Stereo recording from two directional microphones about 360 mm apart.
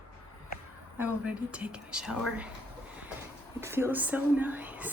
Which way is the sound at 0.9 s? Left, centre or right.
Centre.